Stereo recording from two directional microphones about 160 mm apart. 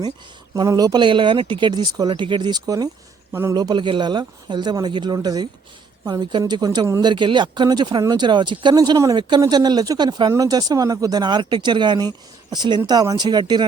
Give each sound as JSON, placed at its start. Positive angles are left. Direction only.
{"t": 0.5, "sound": "speech", "side_deg": -25}